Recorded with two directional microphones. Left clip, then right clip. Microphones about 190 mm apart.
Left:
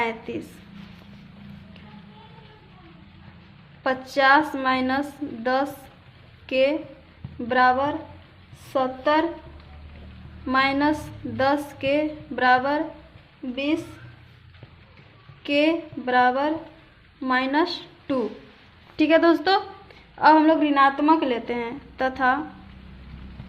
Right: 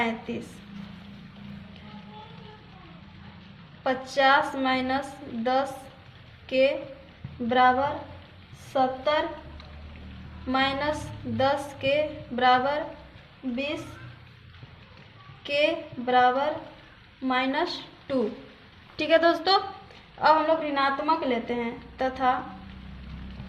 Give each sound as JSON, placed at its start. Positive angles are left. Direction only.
{"t": 0.0, "sound": "a woman's voice", "side_deg": 45}
{"t": 3.8, "sound": "a woman's voice", "side_deg": 45}
{"t": 10.5, "sound": "a woman's voice", "side_deg": 40}
{"t": 15.4, "sound": "a woman's voice", "side_deg": 45}
{"t": 18.9, "sound": "a woman's voice", "side_deg": 30}